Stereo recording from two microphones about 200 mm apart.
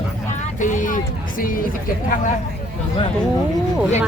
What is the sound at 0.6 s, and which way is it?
Speech, 40° left (ahead or behind).